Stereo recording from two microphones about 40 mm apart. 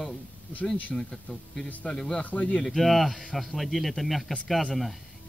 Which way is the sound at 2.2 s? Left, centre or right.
Left.